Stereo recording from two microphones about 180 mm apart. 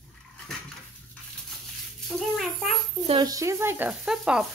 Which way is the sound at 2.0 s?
Centre (ahead or behind).